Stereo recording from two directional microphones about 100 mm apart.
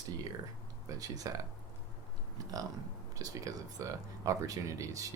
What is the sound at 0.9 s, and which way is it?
Speech, 40° right (ahead or behind).